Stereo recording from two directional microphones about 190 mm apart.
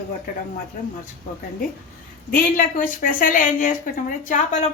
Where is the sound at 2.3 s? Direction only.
50° left (ahead or behind).